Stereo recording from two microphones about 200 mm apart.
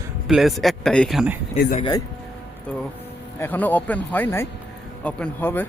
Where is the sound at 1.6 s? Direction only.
40° left (ahead or behind).